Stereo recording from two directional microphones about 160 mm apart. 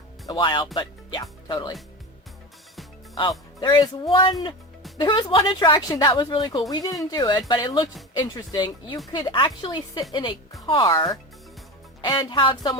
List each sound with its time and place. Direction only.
0.3 s speech: 30° left (ahead or behind)
3.2 s speech: 30° left (ahead or behind)
12.0 s speech: 25° left (ahead or behind)